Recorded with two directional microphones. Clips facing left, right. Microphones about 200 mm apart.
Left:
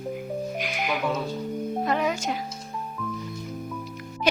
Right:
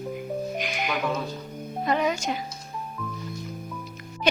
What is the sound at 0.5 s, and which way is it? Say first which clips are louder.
Music: even; 5° left (ahead or behind).